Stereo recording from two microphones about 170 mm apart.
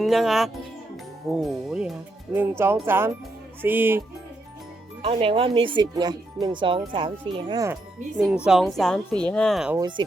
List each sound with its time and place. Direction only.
0.0 s speech: centre (ahead or behind)
2.3 s speech: 15° right (ahead or behind)
5.0 s speech: 35° right (ahead or behind)
8.4 s speech: centre (ahead or behind)
9.7 s speech: 25° right (ahead or behind)